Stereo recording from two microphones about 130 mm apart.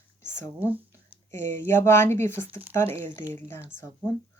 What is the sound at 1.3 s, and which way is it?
Speech, 70° right (ahead or behind).